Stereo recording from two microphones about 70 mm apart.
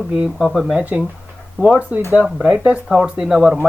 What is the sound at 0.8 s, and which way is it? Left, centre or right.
Speech, centre.